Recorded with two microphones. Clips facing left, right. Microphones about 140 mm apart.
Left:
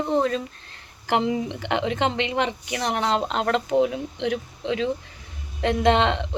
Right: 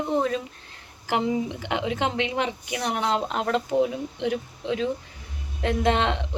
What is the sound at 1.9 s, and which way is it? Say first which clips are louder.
Speech: left 2 dB; 10° right (ahead or behind).